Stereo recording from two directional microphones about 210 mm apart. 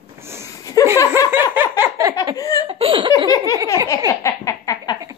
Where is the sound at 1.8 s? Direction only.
15° right (ahead or behind).